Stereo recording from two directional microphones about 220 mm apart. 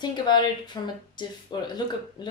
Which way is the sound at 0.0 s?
20° left (ahead or behind).